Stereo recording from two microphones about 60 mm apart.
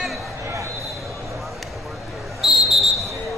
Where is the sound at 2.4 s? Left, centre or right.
Centre.